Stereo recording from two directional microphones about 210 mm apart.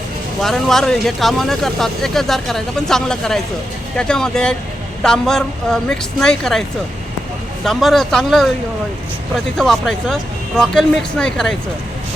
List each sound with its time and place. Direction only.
0.4 s speech: centre (ahead or behind)